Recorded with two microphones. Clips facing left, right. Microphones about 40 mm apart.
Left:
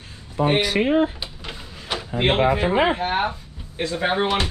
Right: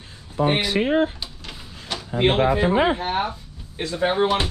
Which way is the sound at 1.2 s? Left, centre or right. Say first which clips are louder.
Left 2 dB; centre.